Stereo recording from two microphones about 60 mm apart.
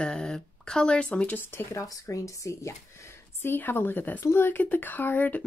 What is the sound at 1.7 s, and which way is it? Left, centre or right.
Speech, left.